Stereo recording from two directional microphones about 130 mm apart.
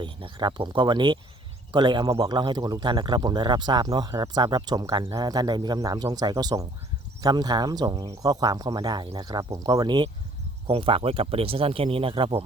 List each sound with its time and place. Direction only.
0.0 s speech: 40° right (ahead or behind)